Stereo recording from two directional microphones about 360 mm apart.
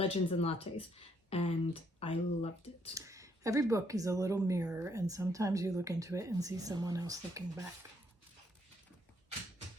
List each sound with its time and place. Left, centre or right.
0.0 s speech: centre
2.9 s speech: centre